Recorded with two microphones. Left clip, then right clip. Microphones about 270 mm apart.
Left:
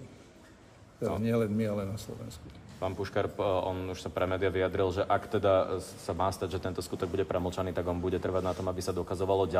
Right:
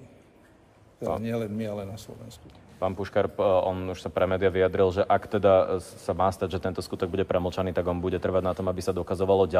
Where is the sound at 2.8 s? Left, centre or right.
Right.